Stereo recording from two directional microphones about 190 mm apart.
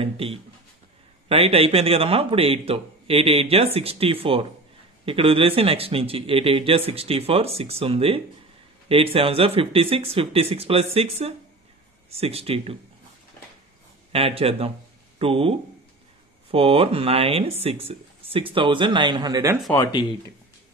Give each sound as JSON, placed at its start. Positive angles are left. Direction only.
{"t": 0.0, "sound": "a man's voice", "side_deg": -30}
{"t": 14.1, "sound": "a man's voice", "side_deg": -30}
{"t": 19.7, "sound": "speech", "side_deg": 20}